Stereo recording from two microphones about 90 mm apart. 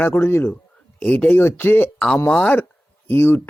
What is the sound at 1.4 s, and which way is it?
Speech, 25° left (ahead or behind).